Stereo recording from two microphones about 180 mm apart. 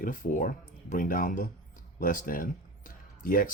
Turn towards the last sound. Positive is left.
turn(degrees=50)  # may be behind; listen again after turning